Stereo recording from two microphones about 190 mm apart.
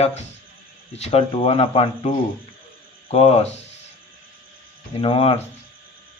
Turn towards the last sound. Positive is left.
turn(degrees=30)  # may be behind; listen again after turning